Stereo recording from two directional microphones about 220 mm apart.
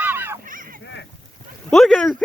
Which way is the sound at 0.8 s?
55° left (ahead or behind).